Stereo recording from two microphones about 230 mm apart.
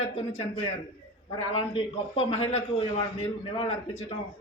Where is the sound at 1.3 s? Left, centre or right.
Left.